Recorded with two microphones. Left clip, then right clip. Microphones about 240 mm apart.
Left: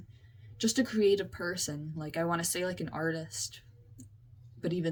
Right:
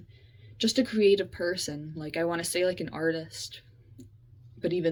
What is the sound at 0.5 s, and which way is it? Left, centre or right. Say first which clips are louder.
Speech: right 4 dB; centre.